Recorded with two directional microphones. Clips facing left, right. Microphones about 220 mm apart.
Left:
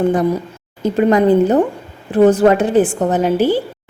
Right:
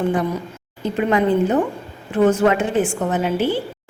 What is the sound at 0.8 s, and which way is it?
A woman's voice, 40° left (ahead or behind).